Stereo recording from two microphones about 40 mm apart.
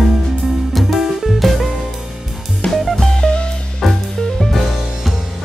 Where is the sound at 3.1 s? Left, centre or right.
Left.